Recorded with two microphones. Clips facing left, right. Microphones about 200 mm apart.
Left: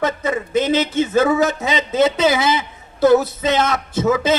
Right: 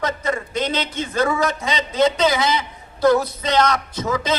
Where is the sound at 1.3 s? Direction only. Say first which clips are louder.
Left 4 dB; 25° left (ahead or behind).